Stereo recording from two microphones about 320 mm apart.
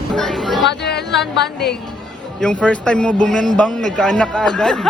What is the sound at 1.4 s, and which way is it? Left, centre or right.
Speech, left.